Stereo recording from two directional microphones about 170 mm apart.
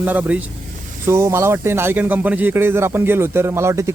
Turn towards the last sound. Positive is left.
turn(degrees=-15)  # may be behind; listen again after turning